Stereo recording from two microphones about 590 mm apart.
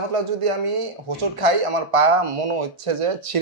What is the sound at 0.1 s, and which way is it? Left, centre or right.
Speech, right.